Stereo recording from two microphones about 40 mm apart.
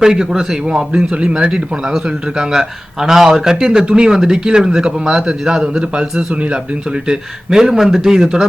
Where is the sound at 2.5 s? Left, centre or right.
Centre.